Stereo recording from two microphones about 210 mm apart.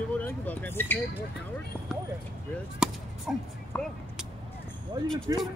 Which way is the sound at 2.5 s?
Centre (ahead or behind).